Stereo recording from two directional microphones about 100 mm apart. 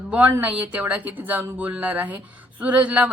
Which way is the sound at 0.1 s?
20° right (ahead or behind).